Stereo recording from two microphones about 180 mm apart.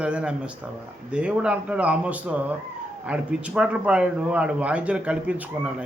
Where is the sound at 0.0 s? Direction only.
5° right (ahead or behind).